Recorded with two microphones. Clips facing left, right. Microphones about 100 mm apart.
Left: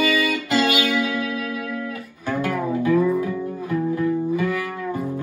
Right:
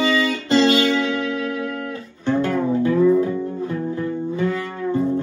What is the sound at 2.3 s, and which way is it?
Music, 25° right (ahead or behind).